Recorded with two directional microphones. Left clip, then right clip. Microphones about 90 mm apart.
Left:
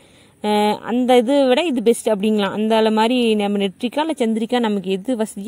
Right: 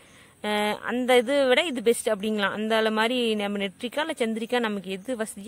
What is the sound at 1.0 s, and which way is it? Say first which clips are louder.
Speech: left 6 dB; 40° left (ahead or behind).